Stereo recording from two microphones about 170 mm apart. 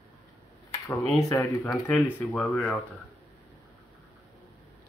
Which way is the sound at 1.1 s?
15° left (ahead or behind).